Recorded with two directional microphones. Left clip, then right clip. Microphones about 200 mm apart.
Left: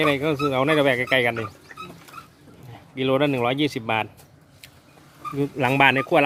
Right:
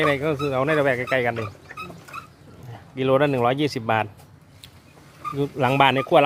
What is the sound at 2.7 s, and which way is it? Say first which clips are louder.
Speech: right 2 dB; 5° right (ahead or behind).